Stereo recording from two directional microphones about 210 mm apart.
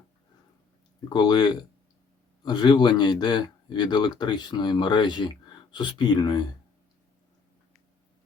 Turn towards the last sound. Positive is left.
turn(degrees=20)  # may be behind; listen again after turning